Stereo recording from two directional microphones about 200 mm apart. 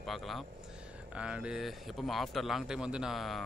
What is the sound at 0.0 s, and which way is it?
Speech, centre (ahead or behind).